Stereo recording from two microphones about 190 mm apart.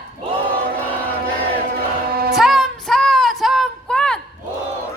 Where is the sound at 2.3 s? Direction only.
Centre (ahead or behind).